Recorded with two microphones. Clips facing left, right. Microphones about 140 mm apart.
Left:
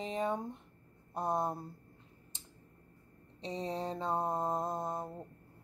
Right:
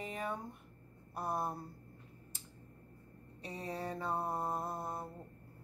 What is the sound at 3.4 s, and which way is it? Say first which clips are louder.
A woman's voice: left 4 dB; 20° left (ahead or behind).